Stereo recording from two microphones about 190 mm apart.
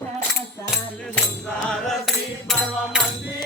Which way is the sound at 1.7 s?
Centre (ahead or behind).